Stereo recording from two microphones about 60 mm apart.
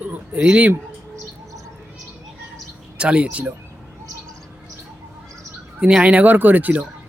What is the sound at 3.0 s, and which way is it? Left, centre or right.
Speech, centre.